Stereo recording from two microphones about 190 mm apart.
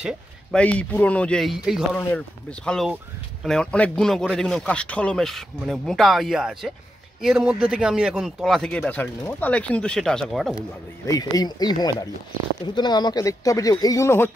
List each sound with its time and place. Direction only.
0.0 s a man's voice: 5° left (ahead or behind)
2.0 s a man's voice: 10° left (ahead or behind)
11.1 s speech: 20° left (ahead or behind)